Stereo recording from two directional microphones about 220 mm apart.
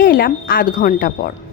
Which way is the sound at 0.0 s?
45° left (ahead or behind).